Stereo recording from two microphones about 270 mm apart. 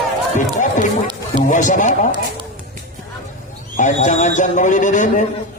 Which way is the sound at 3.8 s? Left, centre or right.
Left.